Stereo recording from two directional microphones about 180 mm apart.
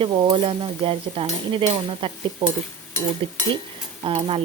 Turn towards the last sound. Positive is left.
turn(degrees=-30)  # may be behind; listen again after turning